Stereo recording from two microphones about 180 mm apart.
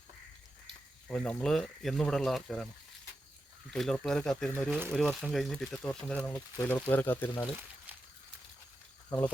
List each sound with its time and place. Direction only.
1.0 s speech: 5° left (ahead or behind)
3.7 s speech: 5° left (ahead or behind)
9.0 s speech: 20° left (ahead or behind)